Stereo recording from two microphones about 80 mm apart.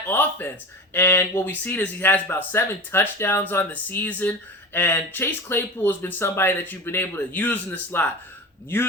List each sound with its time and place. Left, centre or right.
0.1 s speech: left